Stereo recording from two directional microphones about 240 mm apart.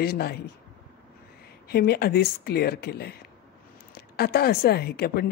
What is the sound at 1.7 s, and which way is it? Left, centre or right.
A woman's voice, left.